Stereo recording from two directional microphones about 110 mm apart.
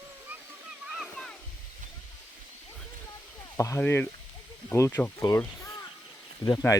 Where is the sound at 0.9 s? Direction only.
5° left (ahead or behind).